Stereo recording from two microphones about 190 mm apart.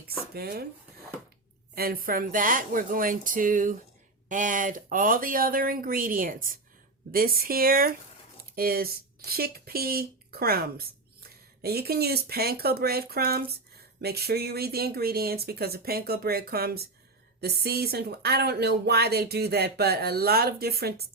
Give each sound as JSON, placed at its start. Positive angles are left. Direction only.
{"t": 0.3, "sound": "speech", "side_deg": -55}
{"t": 1.7, "sound": "speech", "side_deg": -50}